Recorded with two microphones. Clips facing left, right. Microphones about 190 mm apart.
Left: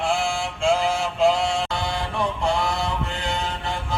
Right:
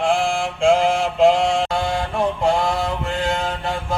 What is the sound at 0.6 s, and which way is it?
Mantra, 50° right (ahead or behind).